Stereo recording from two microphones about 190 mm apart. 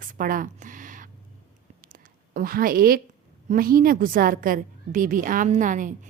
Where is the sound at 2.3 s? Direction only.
50° right (ahead or behind).